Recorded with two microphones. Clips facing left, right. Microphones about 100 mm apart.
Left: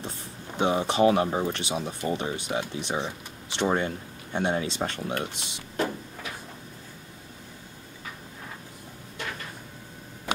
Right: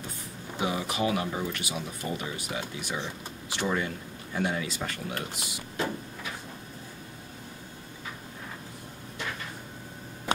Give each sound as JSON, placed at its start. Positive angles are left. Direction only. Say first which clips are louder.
{"t": 0.6, "sound": "speech", "louder": "left 7 dB", "side_deg": 30}